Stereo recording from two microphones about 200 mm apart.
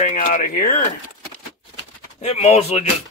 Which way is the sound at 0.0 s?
40° left (ahead or behind).